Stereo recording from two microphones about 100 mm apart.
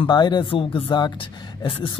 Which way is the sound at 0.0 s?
45° left (ahead or behind).